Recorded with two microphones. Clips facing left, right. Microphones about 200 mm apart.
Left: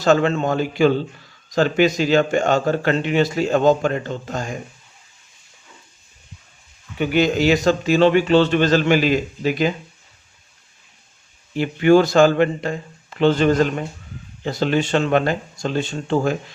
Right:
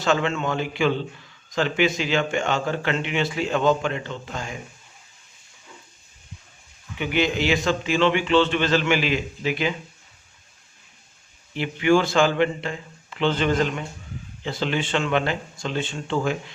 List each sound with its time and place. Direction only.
0.0 s a man's voice: 40° left (ahead or behind)
7.0 s a man's voice: 45° left (ahead or behind)
11.5 s speech: 45° left (ahead or behind)